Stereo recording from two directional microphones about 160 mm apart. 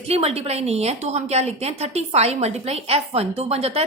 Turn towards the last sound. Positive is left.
turn(degrees=-40)  # may be behind; listen again after turning